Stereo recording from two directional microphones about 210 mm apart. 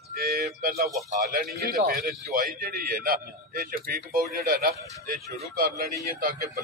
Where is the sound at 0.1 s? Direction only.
45° right (ahead or behind).